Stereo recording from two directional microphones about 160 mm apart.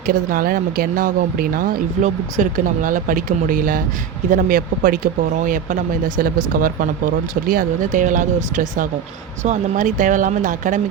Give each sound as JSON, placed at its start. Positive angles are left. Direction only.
{"t": 0.0, "sound": "speech", "side_deg": -60}